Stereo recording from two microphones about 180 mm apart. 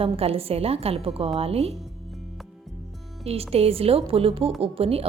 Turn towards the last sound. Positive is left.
turn(degrees=-35)  # may be behind; listen again after turning